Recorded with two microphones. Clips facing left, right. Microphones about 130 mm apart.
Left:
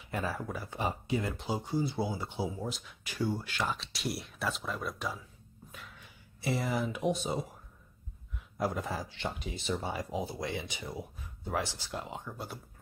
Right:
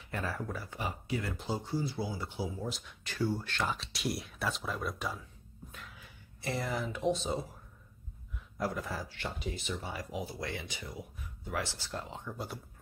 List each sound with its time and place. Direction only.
0.1 s speech: 10° left (ahead or behind)
0.7 s speech: 25° left (ahead or behind)
2.7 s speech: centre (ahead or behind)
8.5 s speech: 20° left (ahead or behind)
9.6 s speech: 35° left (ahead or behind)
11.6 s speech: 15° left (ahead or behind)